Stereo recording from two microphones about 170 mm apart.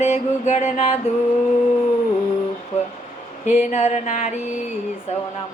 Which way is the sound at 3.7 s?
40° left (ahead or behind).